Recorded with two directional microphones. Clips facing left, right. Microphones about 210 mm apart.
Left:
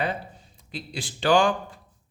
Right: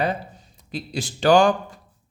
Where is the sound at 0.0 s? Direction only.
40° right (ahead or behind).